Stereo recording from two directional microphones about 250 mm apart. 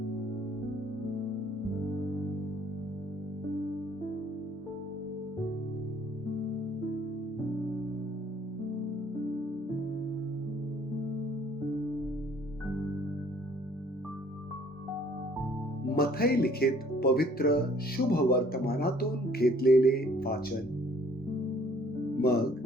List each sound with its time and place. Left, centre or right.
15.9 s speech: left